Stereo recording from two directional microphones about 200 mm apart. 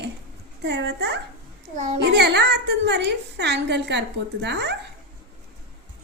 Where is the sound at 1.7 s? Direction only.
35° right (ahead or behind).